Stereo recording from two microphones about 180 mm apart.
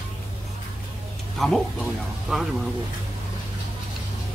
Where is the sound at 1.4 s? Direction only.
Centre (ahead or behind).